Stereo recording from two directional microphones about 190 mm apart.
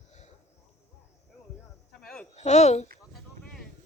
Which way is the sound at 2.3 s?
35° left (ahead or behind).